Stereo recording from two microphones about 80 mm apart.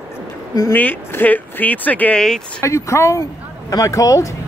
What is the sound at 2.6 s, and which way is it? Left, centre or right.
Speech, left.